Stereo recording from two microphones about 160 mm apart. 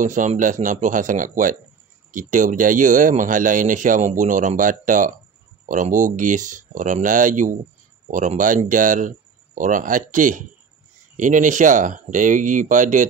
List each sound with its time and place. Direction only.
0.0 s speech: 50° right (ahead or behind)